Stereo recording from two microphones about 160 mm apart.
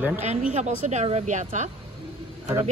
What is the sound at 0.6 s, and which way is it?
A woman's voice, 45° right (ahead or behind).